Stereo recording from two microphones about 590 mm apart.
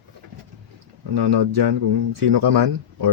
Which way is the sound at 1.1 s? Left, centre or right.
Right.